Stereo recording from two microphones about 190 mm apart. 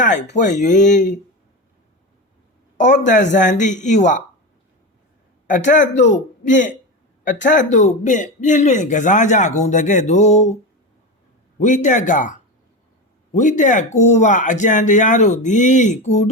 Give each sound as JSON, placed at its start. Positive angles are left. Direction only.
{"t": 0.0, "sound": "a man's voice", "side_deg": 40}
{"t": 2.7, "sound": "a man's voice", "side_deg": 40}
{"t": 5.5, "sound": "a man's voice", "side_deg": 40}
{"t": 11.6, "sound": "a man's voice", "side_deg": 40}